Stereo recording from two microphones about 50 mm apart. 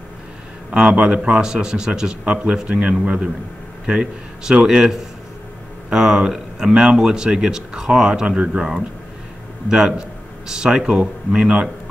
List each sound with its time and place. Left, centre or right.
0.7 s a man's voice: centre
9.7 s speech: centre